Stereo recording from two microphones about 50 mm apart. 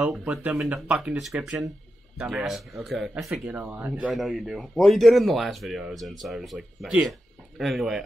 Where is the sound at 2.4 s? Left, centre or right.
Centre.